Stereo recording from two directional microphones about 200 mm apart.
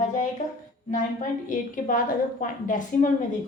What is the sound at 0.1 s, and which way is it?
A woman's voice, 40° left (ahead or behind).